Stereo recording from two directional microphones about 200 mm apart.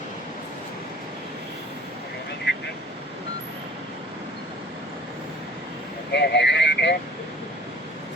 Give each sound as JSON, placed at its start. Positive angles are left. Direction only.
{"t": 2.5, "sound": "vehicle", "side_deg": 60}
{"t": 6.1, "sound": "vehicle", "side_deg": 60}